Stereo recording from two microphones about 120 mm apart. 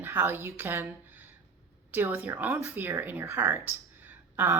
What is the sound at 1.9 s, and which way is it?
Speech, 15° right (ahead or behind).